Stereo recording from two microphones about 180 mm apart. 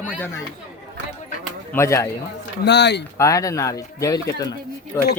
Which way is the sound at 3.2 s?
20° left (ahead or behind).